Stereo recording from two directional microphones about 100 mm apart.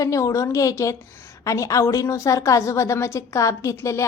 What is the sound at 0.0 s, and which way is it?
A woman's voice, 35° left (ahead or behind).